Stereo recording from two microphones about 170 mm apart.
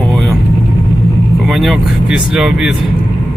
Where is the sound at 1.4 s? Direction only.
Centre (ahead or behind).